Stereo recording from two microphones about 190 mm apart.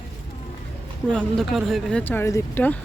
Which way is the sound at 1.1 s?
Centre (ahead or behind).